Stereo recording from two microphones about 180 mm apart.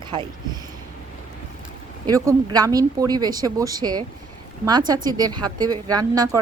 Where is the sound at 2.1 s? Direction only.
20° right (ahead or behind).